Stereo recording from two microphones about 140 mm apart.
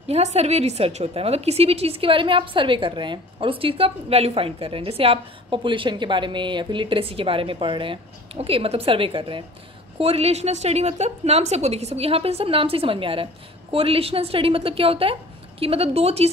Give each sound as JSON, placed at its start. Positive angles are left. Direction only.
{"t": 0.1, "sound": "a woman's voice", "side_deg": -50}